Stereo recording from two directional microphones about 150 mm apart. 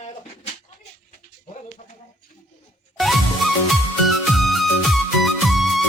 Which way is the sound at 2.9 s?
Centre (ahead or behind).